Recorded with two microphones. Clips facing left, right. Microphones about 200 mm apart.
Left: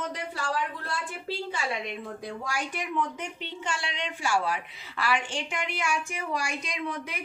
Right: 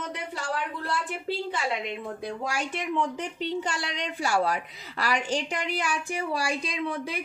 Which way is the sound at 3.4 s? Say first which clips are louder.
Right 5 dB; 35° right (ahead or behind).